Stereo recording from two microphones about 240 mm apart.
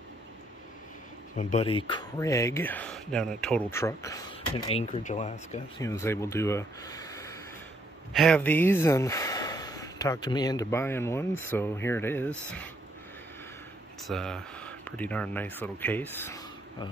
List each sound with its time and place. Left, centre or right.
1.3 s speech: left; by 4.2 s centre
4.6 s speech: left
5.8 s speech: centre
8.1 s speech: centre
14.0 s speech: centre